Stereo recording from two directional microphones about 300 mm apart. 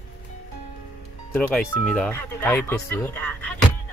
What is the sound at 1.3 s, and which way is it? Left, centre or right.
Speech, centre.